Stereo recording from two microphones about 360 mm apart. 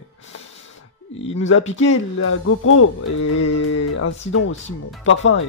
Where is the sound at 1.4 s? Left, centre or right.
Left.